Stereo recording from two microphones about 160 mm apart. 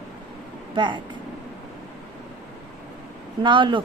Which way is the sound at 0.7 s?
30° right (ahead or behind).